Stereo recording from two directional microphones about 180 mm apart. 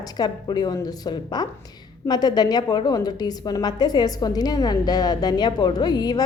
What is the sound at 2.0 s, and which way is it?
A woman's voice, 20° left (ahead or behind).